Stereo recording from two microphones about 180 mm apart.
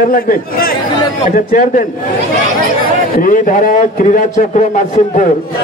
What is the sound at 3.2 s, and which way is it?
A man's voice, 45° left (ahead or behind).